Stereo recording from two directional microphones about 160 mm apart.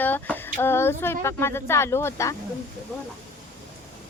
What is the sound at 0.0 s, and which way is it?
Speech, 10° left (ahead or behind).